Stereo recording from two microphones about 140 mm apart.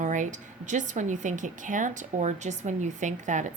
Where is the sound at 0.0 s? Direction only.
65° right (ahead or behind).